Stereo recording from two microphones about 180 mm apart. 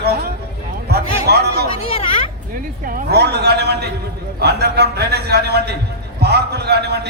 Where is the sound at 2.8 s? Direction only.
60° right (ahead or behind).